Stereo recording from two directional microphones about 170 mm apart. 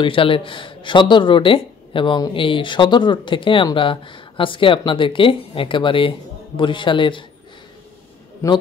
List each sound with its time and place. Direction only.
0.0 s speech: 30° left (ahead or behind)
8.4 s a man's voice: 20° left (ahead or behind)